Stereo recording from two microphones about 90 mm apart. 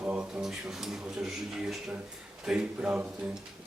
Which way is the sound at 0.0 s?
15° right (ahead or behind).